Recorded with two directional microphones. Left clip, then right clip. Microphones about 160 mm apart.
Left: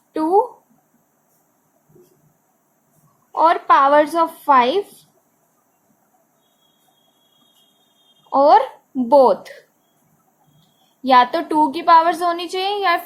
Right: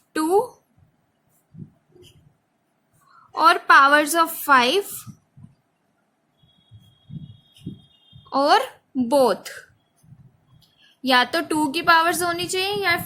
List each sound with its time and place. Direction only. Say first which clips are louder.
3.3 s a woman's voice: left 1 dB; 55° right (ahead or behind)
8.3 s speech: left 6 dB; 55° right (ahead or behind)
11.0 s a woman's voice: left 5 dB; 45° right (ahead or behind)